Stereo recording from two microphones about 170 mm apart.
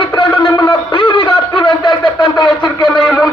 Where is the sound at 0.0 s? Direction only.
30° left (ahead or behind).